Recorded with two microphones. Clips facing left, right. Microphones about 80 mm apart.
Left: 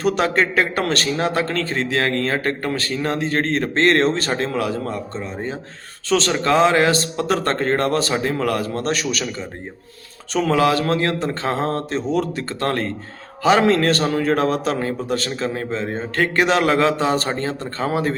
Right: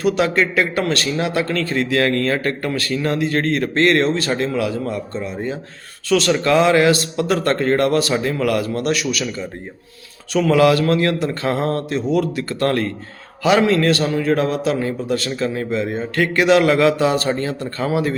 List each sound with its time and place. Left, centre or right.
0.0 s a man's voice: left
10.3 s a man's voice: left
13.4 s a man's voice: left